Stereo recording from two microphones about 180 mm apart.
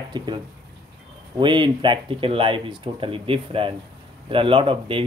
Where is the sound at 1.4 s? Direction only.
25° right (ahead or behind).